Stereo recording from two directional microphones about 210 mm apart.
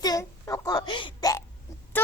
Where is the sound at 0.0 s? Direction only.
15° left (ahead or behind).